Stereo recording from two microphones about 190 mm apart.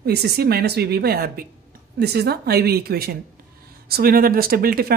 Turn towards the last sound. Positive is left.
turn(degrees=-50)  # may be behind; listen again after turning